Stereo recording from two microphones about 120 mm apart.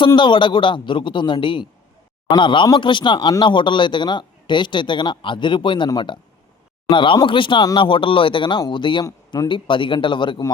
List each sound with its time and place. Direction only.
0.2 s a man's voice: 40° left (ahead or behind)